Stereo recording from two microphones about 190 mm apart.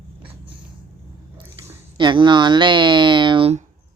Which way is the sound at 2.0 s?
25° right (ahead or behind).